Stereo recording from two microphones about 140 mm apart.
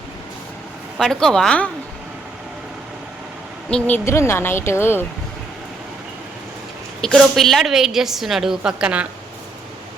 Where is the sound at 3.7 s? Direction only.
10° left (ahead or behind).